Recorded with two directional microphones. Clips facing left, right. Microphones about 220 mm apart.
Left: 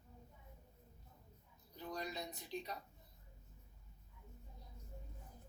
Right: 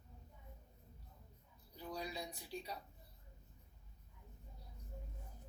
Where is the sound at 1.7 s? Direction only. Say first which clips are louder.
Even; 10° right (ahead or behind).